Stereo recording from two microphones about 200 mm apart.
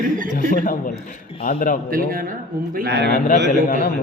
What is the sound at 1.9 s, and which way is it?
A man's voice, 45° right (ahead or behind).